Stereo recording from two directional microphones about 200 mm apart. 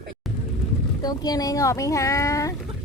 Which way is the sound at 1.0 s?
20° left (ahead or behind).